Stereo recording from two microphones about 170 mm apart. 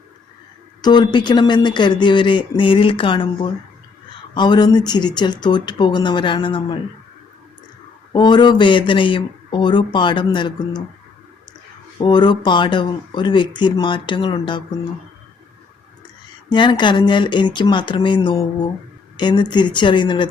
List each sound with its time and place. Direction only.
0.8 s speech: 25° left (ahead or behind)
8.1 s speech: 25° left (ahead or behind)
11.9 s speech: 25° left (ahead or behind)
16.5 s speech: 25° left (ahead or behind)